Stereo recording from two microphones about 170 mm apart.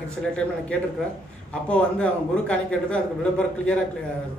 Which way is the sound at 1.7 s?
5° left (ahead or behind).